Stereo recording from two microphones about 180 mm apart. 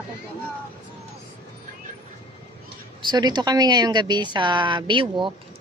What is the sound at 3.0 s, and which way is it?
Speech, 25° right (ahead or behind).